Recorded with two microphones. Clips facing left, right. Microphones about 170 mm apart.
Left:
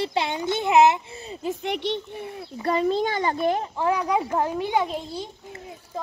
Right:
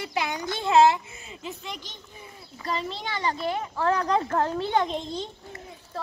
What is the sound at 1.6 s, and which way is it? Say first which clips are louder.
A child's voice: left 13 dB; 65° left (ahead or behind).